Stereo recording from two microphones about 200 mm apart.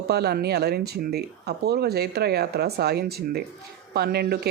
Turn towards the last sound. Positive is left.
turn(degrees=-50)  # may be behind; listen again after turning